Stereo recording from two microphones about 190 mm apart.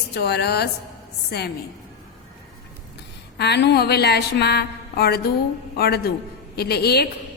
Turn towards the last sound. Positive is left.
turn(degrees=55)  # may be behind; listen again after turning